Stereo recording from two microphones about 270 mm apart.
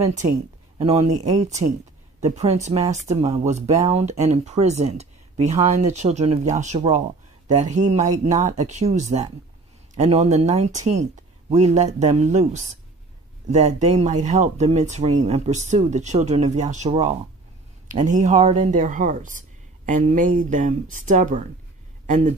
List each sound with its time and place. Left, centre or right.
0.7 s speech: right